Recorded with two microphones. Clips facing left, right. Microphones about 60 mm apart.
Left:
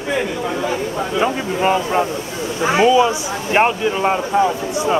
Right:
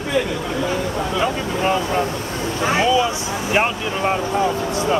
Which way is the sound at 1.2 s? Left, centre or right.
Centre.